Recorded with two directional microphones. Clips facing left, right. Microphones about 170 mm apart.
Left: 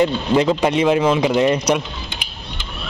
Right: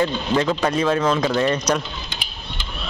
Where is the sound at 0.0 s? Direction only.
20° left (ahead or behind).